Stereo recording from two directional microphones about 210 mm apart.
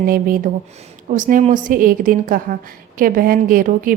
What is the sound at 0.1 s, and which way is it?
A woman's voice, 40° right (ahead or behind).